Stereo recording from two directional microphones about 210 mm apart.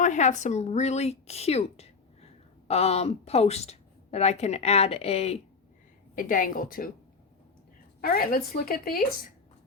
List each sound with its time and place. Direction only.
0.0 s speech: 35° left (ahead or behind)
6.1 s speech: 40° left (ahead or behind)
8.0 s speech: 45° left (ahead or behind)